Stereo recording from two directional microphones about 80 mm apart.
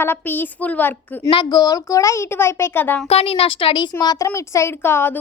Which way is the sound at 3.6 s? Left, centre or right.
Left.